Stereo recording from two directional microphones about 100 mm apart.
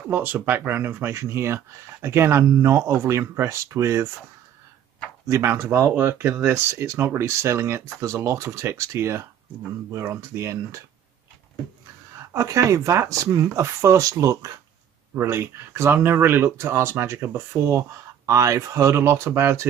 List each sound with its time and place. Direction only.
0.1 s speech: 20° right (ahead or behind)
5.3 s speech: 25° right (ahead or behind)
12.3 s speech: 30° right (ahead or behind)
17.6 s speech: 30° right (ahead or behind)